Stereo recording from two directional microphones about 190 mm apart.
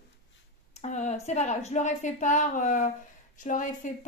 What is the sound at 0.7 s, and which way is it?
A woman's voice, 40° left (ahead or behind).